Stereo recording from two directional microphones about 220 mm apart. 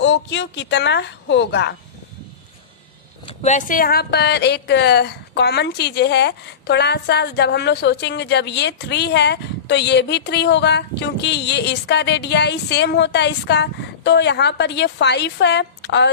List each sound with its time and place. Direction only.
0.0 s speech: 55° left (ahead or behind)
3.2 s speech: 30° left (ahead or behind); by 16.1 s 55° left (ahead or behind)